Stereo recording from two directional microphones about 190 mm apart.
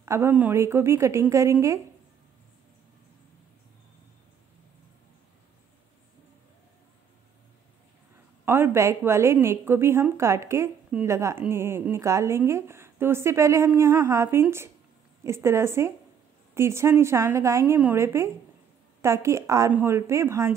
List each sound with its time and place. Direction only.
0.0 s a woman's voice: 15° right (ahead or behind)
8.5 s a woman's voice: 10° right (ahead or behind)